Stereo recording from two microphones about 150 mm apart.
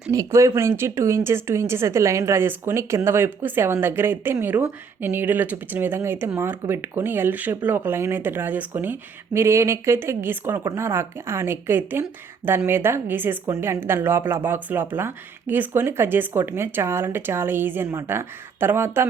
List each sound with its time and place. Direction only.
0.1 s speech: 20° right (ahead or behind)